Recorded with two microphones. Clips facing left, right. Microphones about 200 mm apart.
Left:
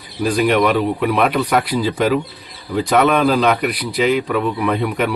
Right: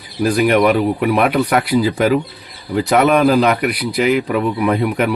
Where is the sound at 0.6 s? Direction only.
45° right (ahead or behind).